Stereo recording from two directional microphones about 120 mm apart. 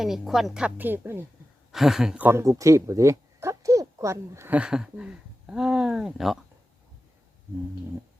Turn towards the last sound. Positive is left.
turn(degrees=-5)  # may be behind; listen again after turning